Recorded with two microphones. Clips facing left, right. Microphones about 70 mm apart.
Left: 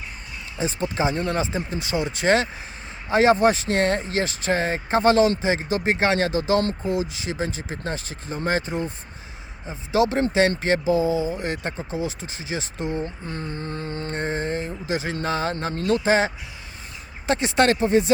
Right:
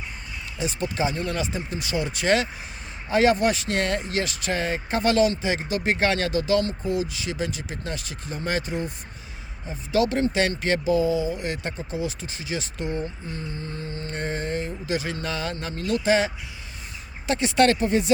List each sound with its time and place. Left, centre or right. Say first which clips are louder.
0.6 s speech: left 2 dB; left
13.2 s mantra: left 3 dB; left
14.2 s speech: left 1 dB; left
15.5 s mantra: left 4 dB; left
16.0 s speech: left 1 dB; left